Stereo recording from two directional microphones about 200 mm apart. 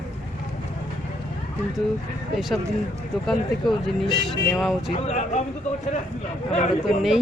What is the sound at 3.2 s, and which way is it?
Speech, centre (ahead or behind).